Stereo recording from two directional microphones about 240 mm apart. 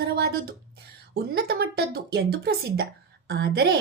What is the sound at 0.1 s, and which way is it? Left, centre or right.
A woman's voice, right.